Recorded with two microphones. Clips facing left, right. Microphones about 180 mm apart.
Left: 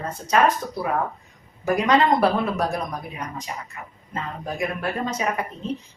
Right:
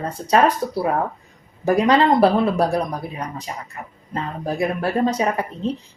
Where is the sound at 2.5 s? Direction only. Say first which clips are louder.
Right 5 dB; 30° right (ahead or behind).